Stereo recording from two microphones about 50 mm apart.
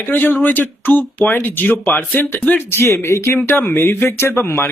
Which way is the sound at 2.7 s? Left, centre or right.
Left.